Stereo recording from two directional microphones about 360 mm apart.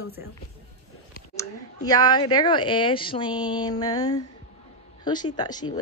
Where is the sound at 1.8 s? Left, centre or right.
Centre.